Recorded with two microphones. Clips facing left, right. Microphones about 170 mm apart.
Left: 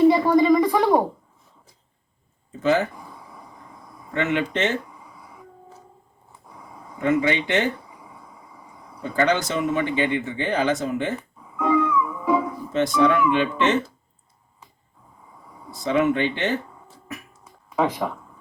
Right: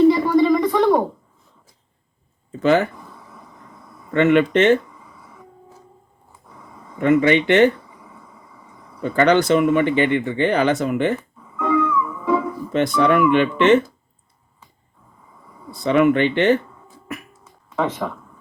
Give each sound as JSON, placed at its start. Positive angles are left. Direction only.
{"t": 0.4, "sound": "a sound", "side_deg": 10}
{"t": 2.5, "sound": "speech", "side_deg": -70}
{"t": 2.9, "sound": "a sound", "side_deg": 10}
{"t": 4.1, "sound": "speech", "side_deg": -60}
{"t": 4.9, "sound": "a sound", "side_deg": 10}
{"t": 6.5, "sound": "a sound", "side_deg": 10}
{"t": 7.0, "sound": "speech", "side_deg": -60}
{"t": 7.9, "sound": "vehicle", "side_deg": 10}
{"t": 9.1, "sound": "speech", "side_deg": -65}
{"t": 11.2, "sound": "music", "side_deg": 10}
{"t": 12.7, "sound": "speech", "side_deg": -60}
{"t": 15.8, "sound": "speech", "side_deg": -65}
{"t": 17.7, "sound": "speech", "side_deg": 10}